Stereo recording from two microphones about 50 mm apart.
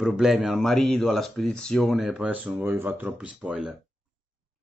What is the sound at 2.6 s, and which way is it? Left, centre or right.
Speech, right.